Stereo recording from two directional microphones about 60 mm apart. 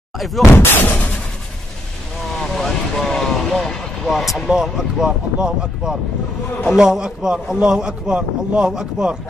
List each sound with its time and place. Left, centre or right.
0.2 s speech: centre
0.8 s a sound: left
2.3 s vehicle: centre
4.5 s speech: centre